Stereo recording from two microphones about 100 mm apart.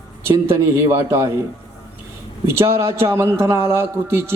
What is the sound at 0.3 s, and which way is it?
A man's voice, 25° right (ahead or behind).